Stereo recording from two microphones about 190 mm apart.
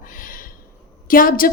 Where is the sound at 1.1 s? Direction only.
45° left (ahead or behind).